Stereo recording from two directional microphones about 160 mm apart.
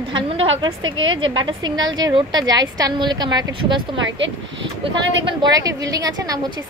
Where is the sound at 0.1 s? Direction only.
35° right (ahead or behind).